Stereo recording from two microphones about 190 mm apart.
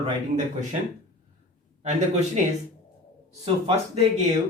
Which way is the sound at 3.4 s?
30° right (ahead or behind).